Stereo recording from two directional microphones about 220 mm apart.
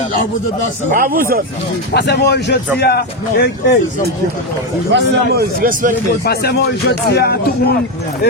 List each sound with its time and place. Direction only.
0.9 s speech: 40° right (ahead or behind)
1.9 s speech: 50° left (ahead or behind)
4.9 s a man's voice: 50° right (ahead or behind)
6.2 s speech: 45° left (ahead or behind)